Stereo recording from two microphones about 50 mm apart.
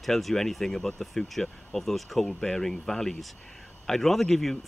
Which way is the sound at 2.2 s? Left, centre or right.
Centre.